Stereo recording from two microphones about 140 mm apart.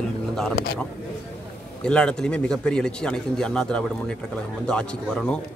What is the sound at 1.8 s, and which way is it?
A man's voice, 5° left (ahead or behind).